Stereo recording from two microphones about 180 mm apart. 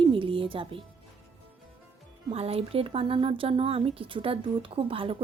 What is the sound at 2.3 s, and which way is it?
Speech, 35° right (ahead or behind).